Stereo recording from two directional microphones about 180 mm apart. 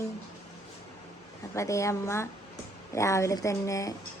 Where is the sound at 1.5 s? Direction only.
15° left (ahead or behind).